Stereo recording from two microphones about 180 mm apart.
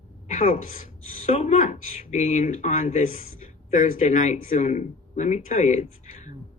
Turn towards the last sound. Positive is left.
turn(degrees=40)  # may be behind; listen again after turning